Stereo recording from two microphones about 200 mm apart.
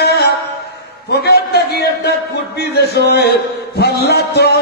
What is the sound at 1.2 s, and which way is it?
A man's voice, 55° left (ahead or behind).